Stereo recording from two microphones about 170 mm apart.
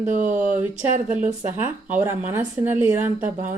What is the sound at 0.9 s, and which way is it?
Speech, 45° right (ahead or behind).